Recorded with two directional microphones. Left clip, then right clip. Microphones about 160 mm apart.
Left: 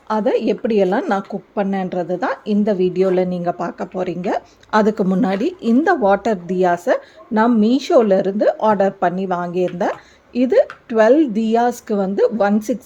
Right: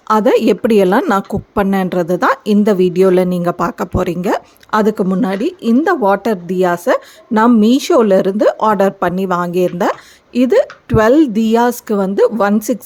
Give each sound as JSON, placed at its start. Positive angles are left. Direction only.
{"t": 0.1, "sound": "a woman's voice", "side_deg": -45}